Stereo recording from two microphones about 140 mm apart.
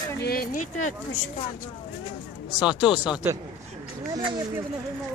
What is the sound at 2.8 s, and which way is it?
Speech, 5° right (ahead or behind).